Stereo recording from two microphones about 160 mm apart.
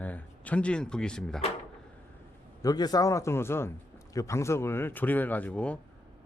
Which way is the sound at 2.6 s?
25° left (ahead or behind).